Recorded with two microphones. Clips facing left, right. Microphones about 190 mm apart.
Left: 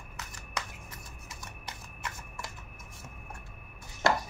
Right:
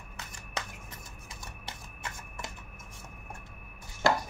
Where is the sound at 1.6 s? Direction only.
25° right (ahead or behind).